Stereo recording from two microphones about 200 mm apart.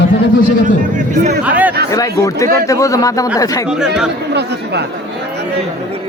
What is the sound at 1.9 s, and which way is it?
Speech, 15° left (ahead or behind).